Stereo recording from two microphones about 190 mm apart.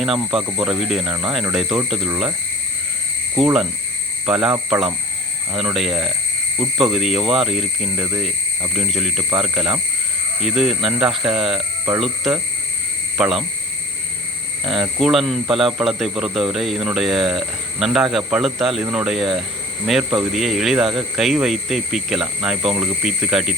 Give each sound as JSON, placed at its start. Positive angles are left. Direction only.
{"t": 0.0, "sound": "speech", "side_deg": 0}
{"t": 3.3, "sound": "speech", "side_deg": 0}
{"t": 5.5, "sound": "speech", "side_deg": 0}
{"t": 14.6, "sound": "speech", "side_deg": 0}